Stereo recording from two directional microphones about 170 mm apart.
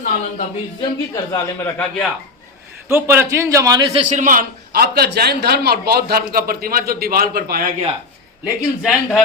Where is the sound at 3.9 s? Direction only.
45° right (ahead or behind); by 7.7 s 60° right (ahead or behind).